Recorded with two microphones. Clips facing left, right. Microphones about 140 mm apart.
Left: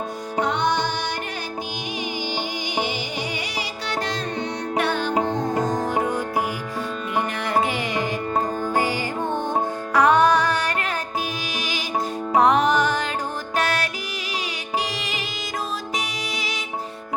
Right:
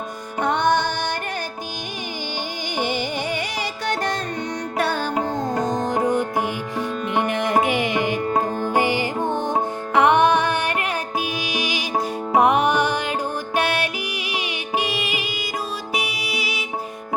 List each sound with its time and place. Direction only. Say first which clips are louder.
0.3 s music: right 3 dB; 55° right (ahead or behind)
2.7 s music: right 4 dB; 50° right (ahead or behind)
4.8 s music: right 1 dB; 40° right (ahead or behind)
5.7 s music: right 2 dB; 25° right (ahead or behind)
12.3 s music: even; 15° right (ahead or behind)
13.8 s music: right 3 dB; 40° left (ahead or behind)
14.8 s music: right 4 dB; 10° right (ahead or behind)